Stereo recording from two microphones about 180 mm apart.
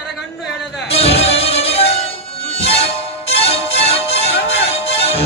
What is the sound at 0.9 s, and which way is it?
Music, 35° left (ahead or behind).